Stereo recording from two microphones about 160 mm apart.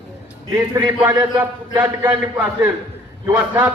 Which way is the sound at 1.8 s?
10° right (ahead or behind).